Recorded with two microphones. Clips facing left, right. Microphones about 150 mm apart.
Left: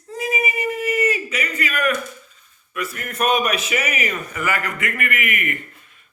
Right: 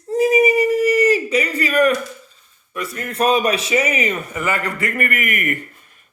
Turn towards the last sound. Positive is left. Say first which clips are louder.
# right 3 dB
turn(degrees=-45)  # may be behind; listen again after turning